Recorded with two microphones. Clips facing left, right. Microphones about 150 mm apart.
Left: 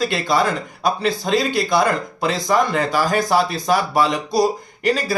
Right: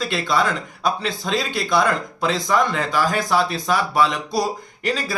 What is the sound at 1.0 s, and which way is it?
Speech, 45° left (ahead or behind).